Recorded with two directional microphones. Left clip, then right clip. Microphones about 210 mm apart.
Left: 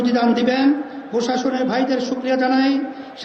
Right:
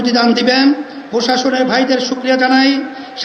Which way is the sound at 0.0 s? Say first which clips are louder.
Right 5 dB; 40° right (ahead or behind).